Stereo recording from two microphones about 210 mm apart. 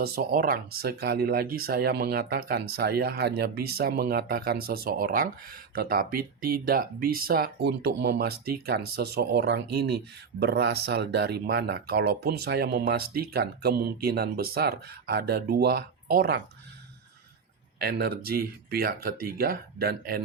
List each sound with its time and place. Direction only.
0.0 s speech: 45° right (ahead or behind)
17.7 s speech: 45° right (ahead or behind)